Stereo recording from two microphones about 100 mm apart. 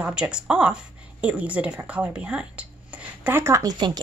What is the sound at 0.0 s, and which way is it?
Speech, 10° right (ahead or behind).